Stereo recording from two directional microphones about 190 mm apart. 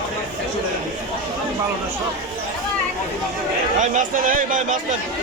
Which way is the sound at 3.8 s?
45° right (ahead or behind).